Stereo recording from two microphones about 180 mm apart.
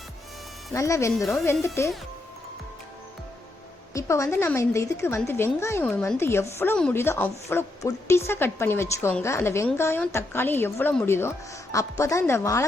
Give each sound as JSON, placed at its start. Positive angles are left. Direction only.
{"t": 0.7, "sound": "a woman's voice", "side_deg": 15}
{"t": 3.9, "sound": "a woman's voice", "side_deg": 15}